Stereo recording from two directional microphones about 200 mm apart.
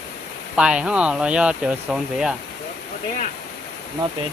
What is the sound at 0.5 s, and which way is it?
Speech, 5° right (ahead or behind).